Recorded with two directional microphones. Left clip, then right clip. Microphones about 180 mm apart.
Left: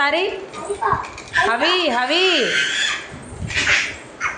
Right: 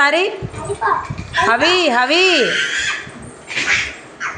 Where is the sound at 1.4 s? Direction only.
20° right (ahead or behind).